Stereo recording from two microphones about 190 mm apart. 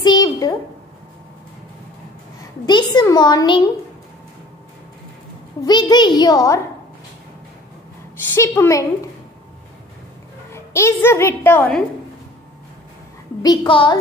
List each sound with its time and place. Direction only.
0.0 s a sound: 20° left (ahead or behind)
2.6 s a woman's voice: 20° left (ahead or behind)
5.7 s a woman's voice: 20° left (ahead or behind)
8.4 s a woman's voice: 15° left (ahead or behind)
10.5 s a woman's voice: 15° left (ahead or behind)
13.4 s a woman's voice: 25° left (ahead or behind)